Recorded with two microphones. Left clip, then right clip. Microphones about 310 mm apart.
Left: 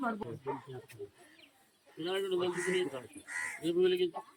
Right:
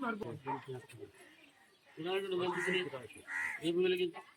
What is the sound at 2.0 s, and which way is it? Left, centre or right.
Speech, centre.